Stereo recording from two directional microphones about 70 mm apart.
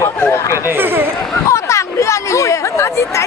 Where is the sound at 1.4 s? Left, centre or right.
Left.